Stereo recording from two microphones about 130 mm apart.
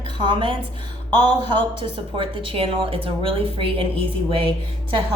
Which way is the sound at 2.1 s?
45° right (ahead or behind).